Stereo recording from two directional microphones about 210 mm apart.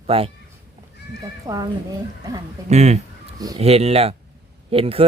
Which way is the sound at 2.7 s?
30° right (ahead or behind).